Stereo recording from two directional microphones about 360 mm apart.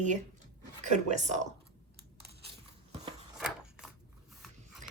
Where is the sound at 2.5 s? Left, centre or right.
Centre.